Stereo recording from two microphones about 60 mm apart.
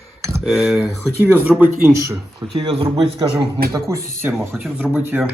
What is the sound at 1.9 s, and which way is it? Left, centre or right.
Speech, right.